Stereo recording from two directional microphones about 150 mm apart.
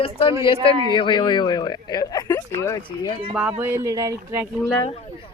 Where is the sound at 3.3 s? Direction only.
10° right (ahead or behind).